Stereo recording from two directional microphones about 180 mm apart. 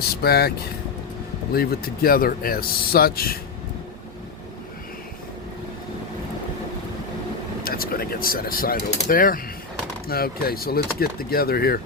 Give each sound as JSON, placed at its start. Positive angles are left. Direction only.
{"t": 0.0, "sound": "speech", "side_deg": 60}
{"t": 1.5, "sound": "speech", "side_deg": 55}
{"t": 7.6, "sound": "speech", "side_deg": 55}